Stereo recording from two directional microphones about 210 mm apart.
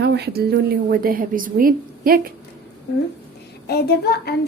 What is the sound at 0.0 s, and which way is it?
A woman's voice, 50° right (ahead or behind).